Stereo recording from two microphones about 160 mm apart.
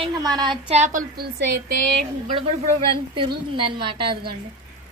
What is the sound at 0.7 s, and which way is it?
Speech, 45° right (ahead or behind).